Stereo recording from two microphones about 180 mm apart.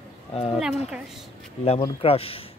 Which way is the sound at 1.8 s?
30° left (ahead or behind).